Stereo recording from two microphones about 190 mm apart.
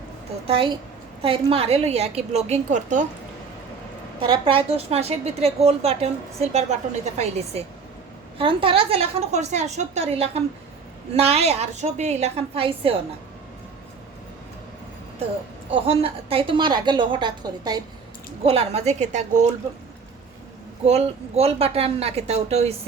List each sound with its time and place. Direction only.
0.4 s a woman's voice: 30° right (ahead or behind)
4.2 s a woman's voice: 25° right (ahead or behind)
15.7 s a woman's voice: 30° right (ahead or behind)
18.4 s a woman's voice: 30° right (ahead or behind)
20.8 s a woman's voice: 35° right (ahead or behind)